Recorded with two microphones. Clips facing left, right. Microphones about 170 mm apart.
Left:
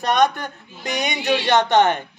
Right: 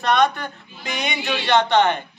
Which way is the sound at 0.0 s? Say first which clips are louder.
Even; 45° left (ahead or behind).